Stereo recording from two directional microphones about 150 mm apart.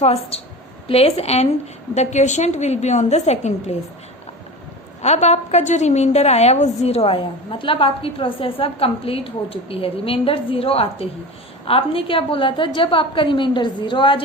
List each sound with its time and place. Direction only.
0.0 s a woman's voice: 40° left (ahead or behind)
5.0 s a woman's voice: 50° left (ahead or behind)